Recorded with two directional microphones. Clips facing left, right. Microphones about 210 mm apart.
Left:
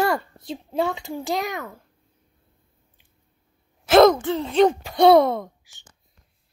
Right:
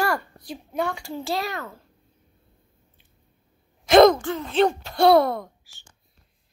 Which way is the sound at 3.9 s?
5° left (ahead or behind).